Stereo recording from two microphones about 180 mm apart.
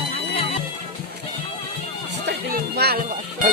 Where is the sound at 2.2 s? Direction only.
60° right (ahead or behind).